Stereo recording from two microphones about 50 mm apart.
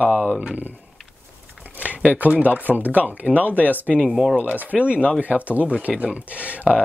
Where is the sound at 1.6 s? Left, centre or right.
Right.